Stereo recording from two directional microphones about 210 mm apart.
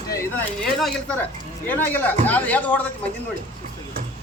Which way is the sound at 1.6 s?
10° left (ahead or behind).